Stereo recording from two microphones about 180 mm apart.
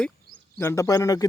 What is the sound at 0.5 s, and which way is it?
Speech, 15° left (ahead or behind).